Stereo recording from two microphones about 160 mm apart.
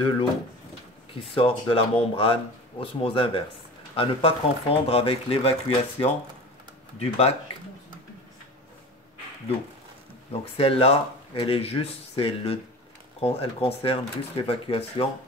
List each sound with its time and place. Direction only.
1.3 s speech: 35° left (ahead or behind)
10.4 s speech: 35° left (ahead or behind)